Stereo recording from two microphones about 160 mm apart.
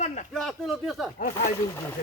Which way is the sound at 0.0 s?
50° left (ahead or behind).